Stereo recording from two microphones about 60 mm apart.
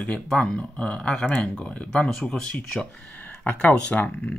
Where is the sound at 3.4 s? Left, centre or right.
Left.